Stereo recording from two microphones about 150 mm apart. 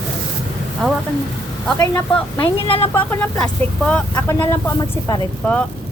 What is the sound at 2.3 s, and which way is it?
Speech, 40° left (ahead or behind).